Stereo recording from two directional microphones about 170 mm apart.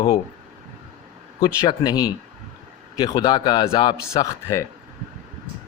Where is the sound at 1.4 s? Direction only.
25° left (ahead or behind).